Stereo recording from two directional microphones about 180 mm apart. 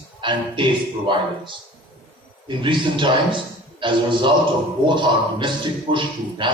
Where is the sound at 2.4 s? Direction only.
25° right (ahead or behind).